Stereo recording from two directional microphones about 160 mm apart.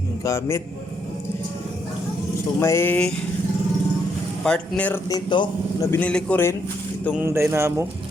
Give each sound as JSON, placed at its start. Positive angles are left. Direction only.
{"t": 0.3, "sound": "a man's voice", "side_deg": 15}
{"t": 2.6, "sound": "a man's voice", "side_deg": 15}
{"t": 4.4, "sound": "speech", "side_deg": 5}
{"t": 5.0, "sound": "a man's voice", "side_deg": 25}
{"t": 5.9, "sound": "a man's voice", "side_deg": 10}
{"t": 7.1, "sound": "speech", "side_deg": -15}